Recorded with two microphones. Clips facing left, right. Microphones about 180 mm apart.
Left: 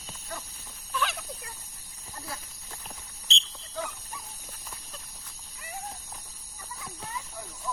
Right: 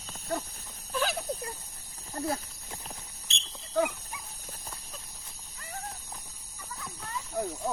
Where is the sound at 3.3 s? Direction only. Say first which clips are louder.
Right 9 dB; 55° right (ahead or behind).